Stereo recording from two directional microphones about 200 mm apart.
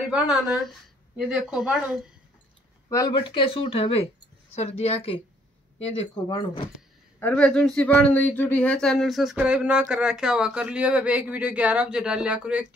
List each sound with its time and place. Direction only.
0.1 s speech: centre (ahead or behind)
2.9 s speech: 20° left (ahead or behind)
7.2 s speech: 5° left (ahead or behind)